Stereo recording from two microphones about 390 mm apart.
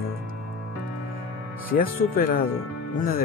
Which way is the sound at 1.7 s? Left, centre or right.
Left.